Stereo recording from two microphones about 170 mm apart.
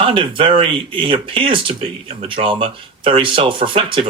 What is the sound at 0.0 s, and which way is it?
Speech, 30° right (ahead or behind).